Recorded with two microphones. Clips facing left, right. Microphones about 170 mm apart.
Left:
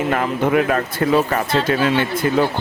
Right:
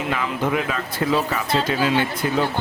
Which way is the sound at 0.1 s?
50° left (ahead or behind).